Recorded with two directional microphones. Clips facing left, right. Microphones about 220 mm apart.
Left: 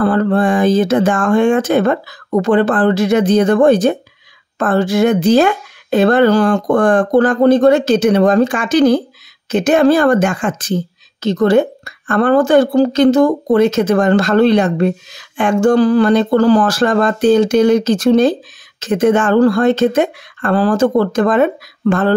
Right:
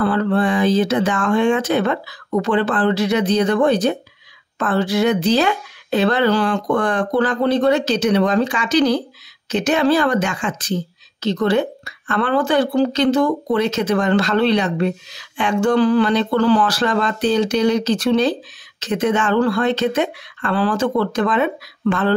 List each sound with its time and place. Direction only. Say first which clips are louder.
0.0 s speech: left 4 dB; 45° left (ahead or behind)